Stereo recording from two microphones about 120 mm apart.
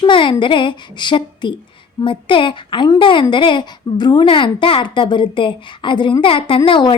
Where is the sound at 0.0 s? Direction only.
45° left (ahead or behind).